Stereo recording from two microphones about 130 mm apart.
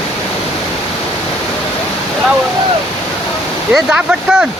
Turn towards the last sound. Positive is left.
turn(degrees=-5)  # may be behind; listen again after turning